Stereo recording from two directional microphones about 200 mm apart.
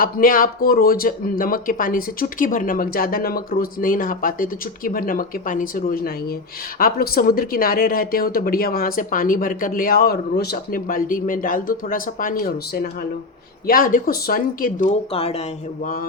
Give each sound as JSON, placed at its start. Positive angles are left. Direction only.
{"t": 0.0, "sound": "speech", "side_deg": 45}